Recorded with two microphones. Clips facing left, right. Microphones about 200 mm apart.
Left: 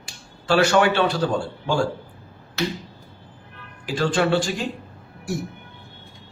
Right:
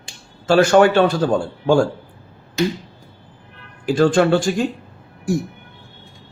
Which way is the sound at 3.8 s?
45° right (ahead or behind).